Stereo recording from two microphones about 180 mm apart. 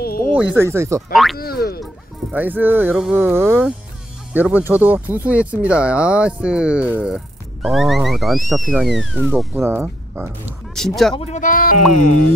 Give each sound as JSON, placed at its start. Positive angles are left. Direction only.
{"t": 0.0, "sound": "a sound", "side_deg": 55}
{"t": 0.4, "sound": "speech", "side_deg": -10}
{"t": 1.1, "sound": "speech", "side_deg": 0}
{"t": 1.4, "sound": "boing", "side_deg": 60}
{"t": 2.3, "sound": "speech", "side_deg": -10}
{"t": 9.3, "sound": "speech", "side_deg": -10}
{"t": 10.8, "sound": "speech", "side_deg": 5}
{"t": 11.1, "sound": "speech", "side_deg": 40}